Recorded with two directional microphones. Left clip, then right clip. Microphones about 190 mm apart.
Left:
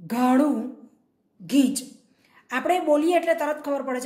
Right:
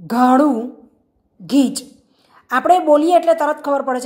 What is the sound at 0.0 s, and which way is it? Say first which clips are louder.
A woman's voice: right 8 dB; 25° right (ahead or behind).